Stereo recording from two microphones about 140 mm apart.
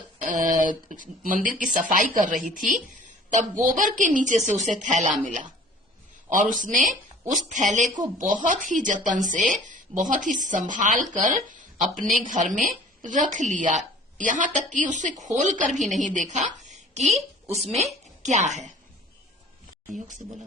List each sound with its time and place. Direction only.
0.2 s a woman's voice: 65° right (ahead or behind)